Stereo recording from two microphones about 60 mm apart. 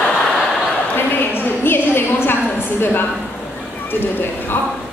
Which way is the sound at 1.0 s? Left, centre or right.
Left.